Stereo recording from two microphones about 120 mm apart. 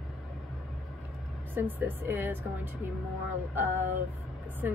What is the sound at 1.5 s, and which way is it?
Speech, 15° right (ahead or behind).